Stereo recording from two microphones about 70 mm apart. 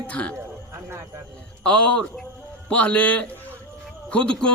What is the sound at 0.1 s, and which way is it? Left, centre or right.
Speech, centre.